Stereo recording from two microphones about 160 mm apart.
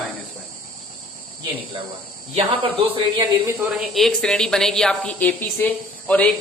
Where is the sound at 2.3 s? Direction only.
35° right (ahead or behind).